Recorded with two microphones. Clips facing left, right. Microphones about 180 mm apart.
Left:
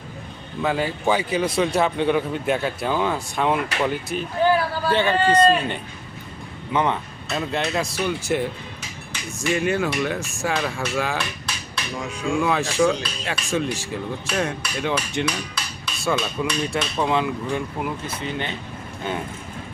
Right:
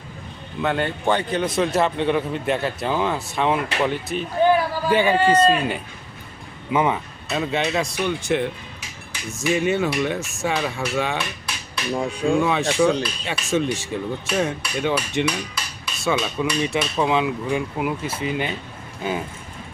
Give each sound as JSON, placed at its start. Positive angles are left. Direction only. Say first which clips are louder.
{"t": 0.6, "sound": "a man's voice", "louder": "even", "side_deg": 5}
{"t": 4.5, "sound": "a man's voice", "louder": "right 2 dB", "side_deg": -10}
{"t": 11.9, "sound": "speech", "louder": "right 5 dB", "side_deg": -35}
{"t": 12.4, "sound": "a man's voice", "louder": "left 2 dB", "side_deg": 0}